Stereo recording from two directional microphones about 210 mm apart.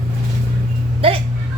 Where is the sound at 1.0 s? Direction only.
25° right (ahead or behind).